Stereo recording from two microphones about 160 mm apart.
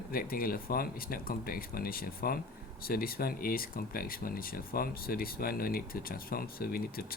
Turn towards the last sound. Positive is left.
turn(degrees=70)  # may be behind; listen again after turning